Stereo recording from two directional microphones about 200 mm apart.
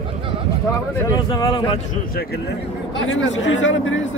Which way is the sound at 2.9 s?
70° left (ahead or behind).